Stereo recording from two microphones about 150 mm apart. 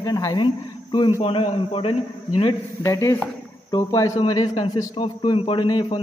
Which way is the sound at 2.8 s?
20° left (ahead or behind).